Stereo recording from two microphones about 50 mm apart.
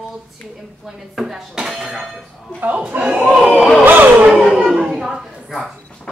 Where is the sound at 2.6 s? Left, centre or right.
Right.